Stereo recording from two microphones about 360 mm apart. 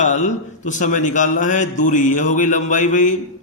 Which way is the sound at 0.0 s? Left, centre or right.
Centre.